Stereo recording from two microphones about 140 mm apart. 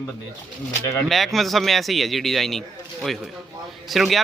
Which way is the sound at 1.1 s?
Centre (ahead or behind).